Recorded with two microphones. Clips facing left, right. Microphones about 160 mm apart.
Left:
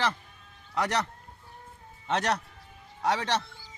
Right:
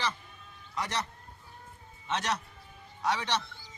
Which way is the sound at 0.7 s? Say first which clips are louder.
Left 6 dB; 70° left (ahead or behind).